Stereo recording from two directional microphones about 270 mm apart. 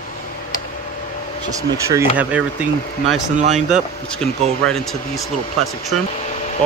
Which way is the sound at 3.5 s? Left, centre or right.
Centre.